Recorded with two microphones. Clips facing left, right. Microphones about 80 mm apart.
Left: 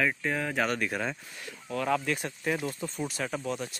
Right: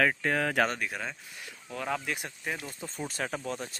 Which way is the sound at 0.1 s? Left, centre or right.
Right.